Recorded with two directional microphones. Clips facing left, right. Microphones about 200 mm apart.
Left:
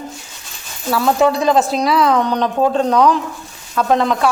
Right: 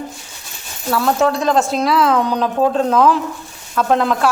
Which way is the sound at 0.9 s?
Centre (ahead or behind).